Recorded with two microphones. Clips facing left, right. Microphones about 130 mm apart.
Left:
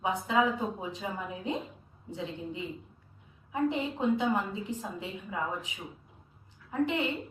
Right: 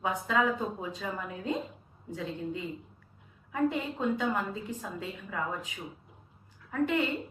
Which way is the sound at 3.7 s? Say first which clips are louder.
Left 2 dB; 20° left (ahead or behind).